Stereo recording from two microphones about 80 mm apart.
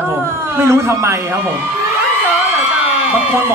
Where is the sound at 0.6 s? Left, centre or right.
Right.